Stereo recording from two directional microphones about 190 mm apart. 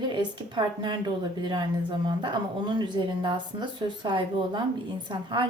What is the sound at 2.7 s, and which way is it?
Speech, 25° right (ahead or behind).